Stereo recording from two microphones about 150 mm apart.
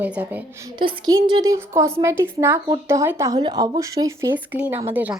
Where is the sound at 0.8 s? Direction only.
30° right (ahead or behind).